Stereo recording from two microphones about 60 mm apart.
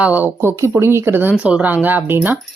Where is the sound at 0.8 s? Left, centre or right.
Right.